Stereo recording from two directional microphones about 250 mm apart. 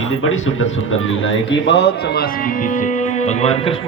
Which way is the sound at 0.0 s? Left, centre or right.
Left.